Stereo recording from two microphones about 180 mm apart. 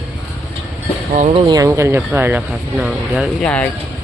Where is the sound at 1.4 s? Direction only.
20° right (ahead or behind); by 3.5 s 5° right (ahead or behind).